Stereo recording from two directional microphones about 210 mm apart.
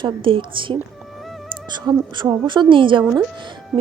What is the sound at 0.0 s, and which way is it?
A woman's voice, 25° right (ahead or behind).